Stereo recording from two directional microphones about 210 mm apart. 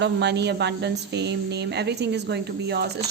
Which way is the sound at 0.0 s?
55° right (ahead or behind).